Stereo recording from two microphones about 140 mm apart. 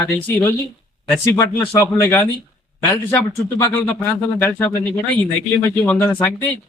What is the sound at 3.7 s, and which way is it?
A man's voice, 10° left (ahead or behind).